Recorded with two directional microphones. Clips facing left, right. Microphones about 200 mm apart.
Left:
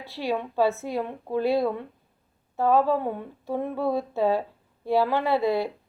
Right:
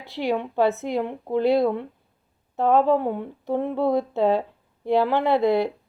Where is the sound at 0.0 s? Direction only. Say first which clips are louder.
Right 3 dB; 15° right (ahead or behind).